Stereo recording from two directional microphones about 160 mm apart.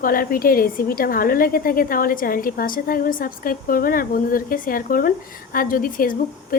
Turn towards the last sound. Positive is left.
turn(degrees=60)  # may be behind; listen again after turning